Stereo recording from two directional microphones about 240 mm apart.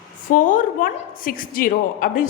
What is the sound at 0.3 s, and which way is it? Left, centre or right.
A woman's voice, left.